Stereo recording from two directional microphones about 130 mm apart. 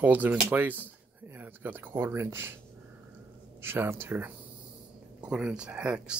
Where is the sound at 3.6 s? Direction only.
15° right (ahead or behind).